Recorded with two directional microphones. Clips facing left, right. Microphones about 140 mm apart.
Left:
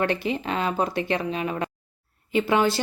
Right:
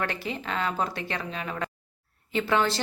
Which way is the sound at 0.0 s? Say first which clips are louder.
Left 7 dB; 20° left (ahead or behind).